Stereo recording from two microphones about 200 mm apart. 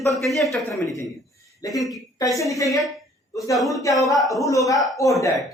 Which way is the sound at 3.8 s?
15° left (ahead or behind).